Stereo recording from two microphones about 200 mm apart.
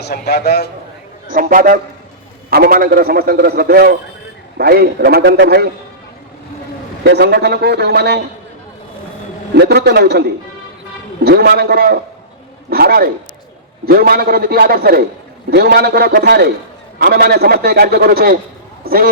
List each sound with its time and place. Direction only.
0.0 s a man's voice: 55° left (ahead or behind)
1.3 s a man's voice: 45° right (ahead or behind)
7.0 s a man's voice: 55° right (ahead or behind)
9.6 s a man's voice: 55° right (ahead or behind)